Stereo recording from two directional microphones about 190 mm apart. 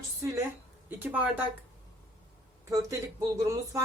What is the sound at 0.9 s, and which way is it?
Speech, 10° right (ahead or behind).